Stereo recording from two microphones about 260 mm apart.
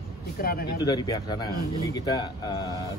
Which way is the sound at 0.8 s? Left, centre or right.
Centre.